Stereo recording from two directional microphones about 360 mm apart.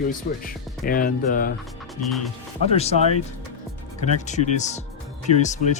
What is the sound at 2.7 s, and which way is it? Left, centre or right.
Speech, centre.